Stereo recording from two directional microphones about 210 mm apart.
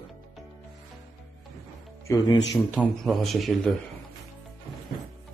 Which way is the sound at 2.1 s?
15° left (ahead or behind).